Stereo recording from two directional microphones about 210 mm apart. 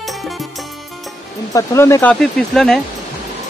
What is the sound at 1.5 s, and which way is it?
Speech, 15° left (ahead or behind).